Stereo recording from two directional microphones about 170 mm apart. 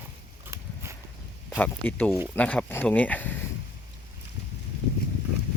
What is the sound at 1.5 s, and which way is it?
Speech, 10° left (ahead or behind).